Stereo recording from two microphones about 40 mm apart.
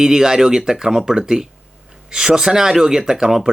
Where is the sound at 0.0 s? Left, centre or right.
Centre.